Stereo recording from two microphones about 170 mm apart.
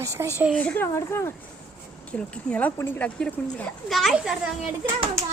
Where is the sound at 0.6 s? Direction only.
10° left (ahead or behind).